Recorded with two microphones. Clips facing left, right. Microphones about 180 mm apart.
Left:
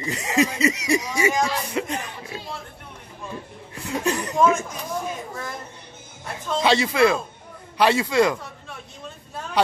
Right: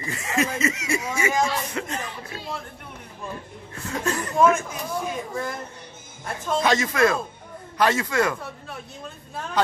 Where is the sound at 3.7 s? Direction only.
15° left (ahead or behind).